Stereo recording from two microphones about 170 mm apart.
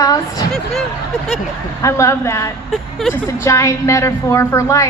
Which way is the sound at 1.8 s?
15° left (ahead or behind).